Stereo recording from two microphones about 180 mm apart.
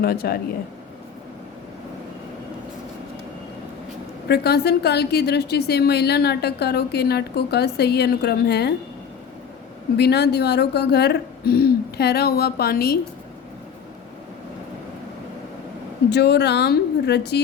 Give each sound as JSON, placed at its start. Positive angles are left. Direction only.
{"t": 0.0, "sound": "a woman's voice", "side_deg": 55}
{"t": 4.3, "sound": "a woman's voice", "side_deg": 65}
{"t": 10.0, "sound": "a woman's voice", "side_deg": 65}
{"t": 16.0, "sound": "a woman's voice", "side_deg": 65}